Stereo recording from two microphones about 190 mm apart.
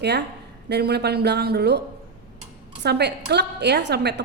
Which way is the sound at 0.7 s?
60° right (ahead or behind).